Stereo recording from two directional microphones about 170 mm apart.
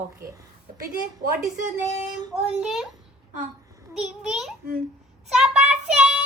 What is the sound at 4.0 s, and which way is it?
Speech, 5° right (ahead or behind).